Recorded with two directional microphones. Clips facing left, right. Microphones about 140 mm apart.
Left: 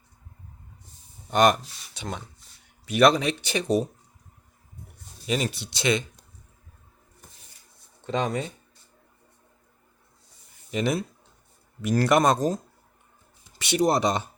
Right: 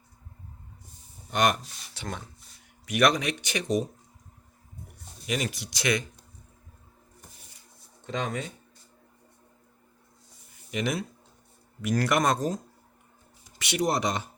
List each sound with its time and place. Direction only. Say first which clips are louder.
1.3 s speech: left 5 dB; 35° left (ahead or behind)
1.9 s speech: left 2 dB; 20° left (ahead or behind)
2.8 s speech: left 4 dB; 30° left (ahead or behind)
5.2 s speech: left 3 dB; 30° left (ahead or behind)
8.0 s speech: left 5 dB; 35° left (ahead or behind)
10.7 s speech: left 4 dB; 30° left (ahead or behind)
13.6 s speech: left 5 dB; 30° left (ahead or behind)